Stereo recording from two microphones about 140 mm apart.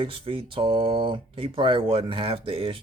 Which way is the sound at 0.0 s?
40° right (ahead or behind).